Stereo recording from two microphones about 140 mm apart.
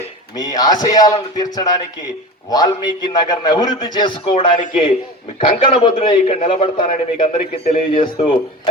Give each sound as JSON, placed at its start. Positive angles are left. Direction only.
{"t": 0.3, "sound": "a man's voice", "side_deg": 30}
{"t": 2.5, "sound": "a man's voice", "side_deg": 30}